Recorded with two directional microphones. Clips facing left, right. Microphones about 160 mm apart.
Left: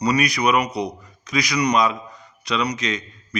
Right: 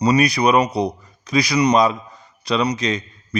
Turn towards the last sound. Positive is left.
turn(degrees=-35)  # may be behind; listen again after turning